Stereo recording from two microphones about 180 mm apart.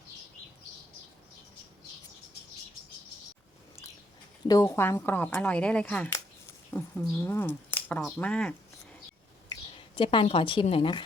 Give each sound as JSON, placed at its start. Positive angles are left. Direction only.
{"t": 4.4, "sound": "speech", "side_deg": 20}
{"t": 9.5, "sound": "a sound", "side_deg": 30}
{"t": 10.2, "sound": "speech", "side_deg": 30}